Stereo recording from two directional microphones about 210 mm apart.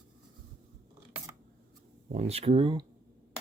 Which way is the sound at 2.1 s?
30° right (ahead or behind).